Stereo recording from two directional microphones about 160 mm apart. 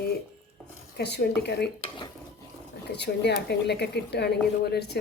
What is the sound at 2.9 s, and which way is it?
Speech, 90° left.